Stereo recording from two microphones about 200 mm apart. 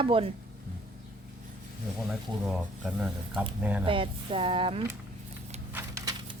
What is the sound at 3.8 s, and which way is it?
A woman's voice, 25° right (ahead or behind).